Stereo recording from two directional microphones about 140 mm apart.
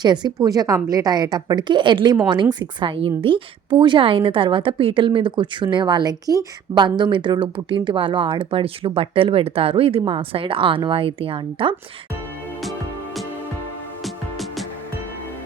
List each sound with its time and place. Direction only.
0.0 s a woman's voice: 30° right (ahead or behind)
14.0 s music: centre (ahead or behind)